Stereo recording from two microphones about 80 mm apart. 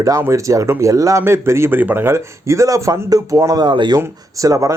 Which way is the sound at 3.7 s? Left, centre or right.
Right.